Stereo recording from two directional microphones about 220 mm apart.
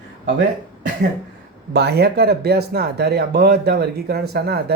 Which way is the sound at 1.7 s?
50° right (ahead or behind).